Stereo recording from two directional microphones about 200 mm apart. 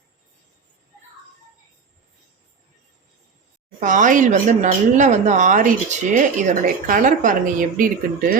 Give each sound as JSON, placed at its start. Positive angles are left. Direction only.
{"t": 3.8, "sound": "speech", "side_deg": -40}